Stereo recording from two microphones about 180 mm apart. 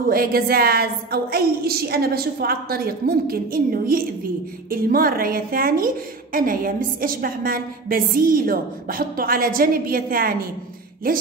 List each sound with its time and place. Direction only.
0.1 s a woman's voice: 55° right (ahead or behind)